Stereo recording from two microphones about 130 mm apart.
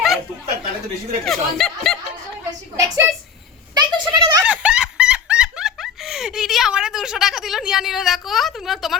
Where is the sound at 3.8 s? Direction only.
35° right (ahead or behind).